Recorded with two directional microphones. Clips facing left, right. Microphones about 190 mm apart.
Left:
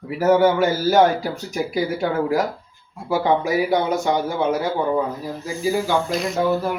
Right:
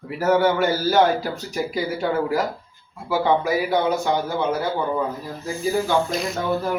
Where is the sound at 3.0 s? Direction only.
15° left (ahead or behind).